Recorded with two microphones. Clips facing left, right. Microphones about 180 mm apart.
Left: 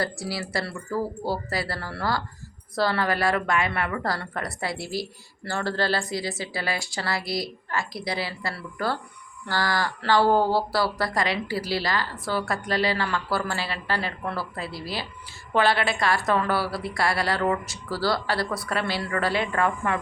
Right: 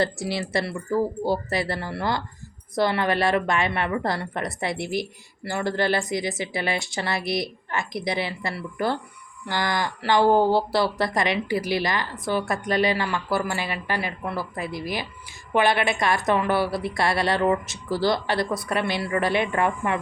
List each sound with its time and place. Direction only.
0.0 s a woman's voice: 20° right (ahead or behind)